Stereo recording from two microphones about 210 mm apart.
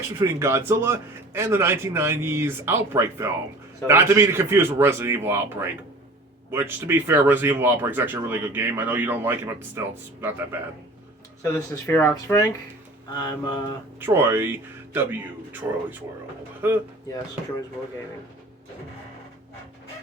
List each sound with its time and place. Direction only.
0.2 s speech: 10° right (ahead or behind)
11.5 s speech: 15° left (ahead or behind)
13.1 s mantra: 20° left (ahead or behind)
14.0 s speech: 10° right (ahead or behind)
16.6 s speech: 10° right (ahead or behind)